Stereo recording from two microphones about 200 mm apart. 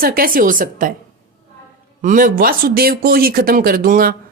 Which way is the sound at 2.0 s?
40° right (ahead or behind).